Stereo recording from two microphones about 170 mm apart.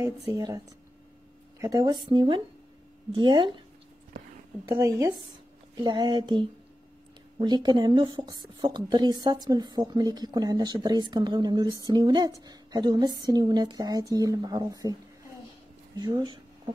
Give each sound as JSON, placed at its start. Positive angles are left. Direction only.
{"t": 0.3, "sound": "speech", "side_deg": -20}
{"t": 1.6, "sound": "speech", "side_deg": -20}
{"t": 4.6, "sound": "speech", "side_deg": -20}
{"t": 16.0, "sound": "speech", "side_deg": -25}